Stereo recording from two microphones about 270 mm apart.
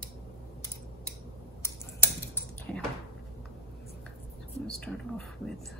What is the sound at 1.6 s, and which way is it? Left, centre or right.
Typing, centre.